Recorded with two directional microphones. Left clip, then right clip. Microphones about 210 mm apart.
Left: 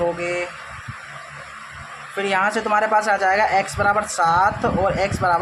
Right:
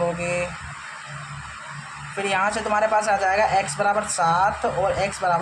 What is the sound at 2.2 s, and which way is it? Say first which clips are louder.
Speech: left 3 dB; 25° left (ahead or behind).